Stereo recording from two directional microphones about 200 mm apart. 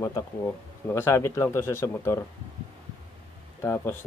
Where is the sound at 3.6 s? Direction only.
10° left (ahead or behind).